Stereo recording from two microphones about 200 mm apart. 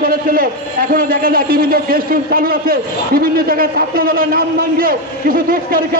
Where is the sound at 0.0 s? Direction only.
45° right (ahead or behind).